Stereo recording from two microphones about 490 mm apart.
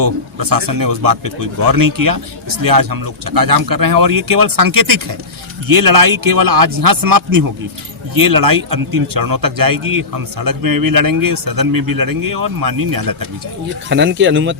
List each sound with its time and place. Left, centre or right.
0.0 s a man's voice: right
13.9 s speech: right